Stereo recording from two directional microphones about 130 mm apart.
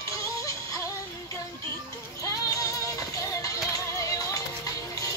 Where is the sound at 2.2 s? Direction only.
25° left (ahead or behind).